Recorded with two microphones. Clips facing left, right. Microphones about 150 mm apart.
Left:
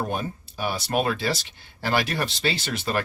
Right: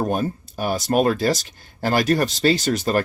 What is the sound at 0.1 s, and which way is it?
Speech, 45° right (ahead or behind).